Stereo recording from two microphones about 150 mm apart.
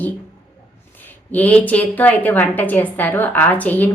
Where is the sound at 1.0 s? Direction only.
10° left (ahead or behind).